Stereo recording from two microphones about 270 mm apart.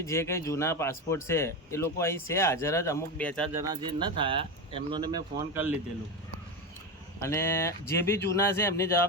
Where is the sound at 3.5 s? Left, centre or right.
Centre.